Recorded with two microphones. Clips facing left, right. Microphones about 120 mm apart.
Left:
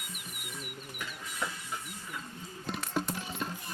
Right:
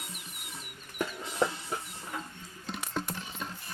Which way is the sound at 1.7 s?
45° right (ahead or behind).